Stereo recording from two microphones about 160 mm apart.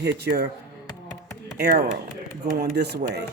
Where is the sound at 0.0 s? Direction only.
90° right.